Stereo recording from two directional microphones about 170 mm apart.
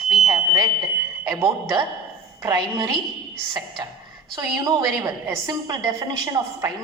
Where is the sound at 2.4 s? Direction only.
25° right (ahead or behind).